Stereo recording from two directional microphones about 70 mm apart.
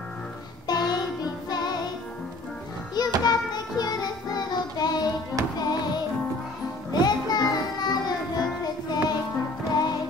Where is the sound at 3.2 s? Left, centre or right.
Left.